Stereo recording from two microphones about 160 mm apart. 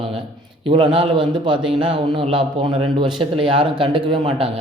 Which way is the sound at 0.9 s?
30° right (ahead or behind).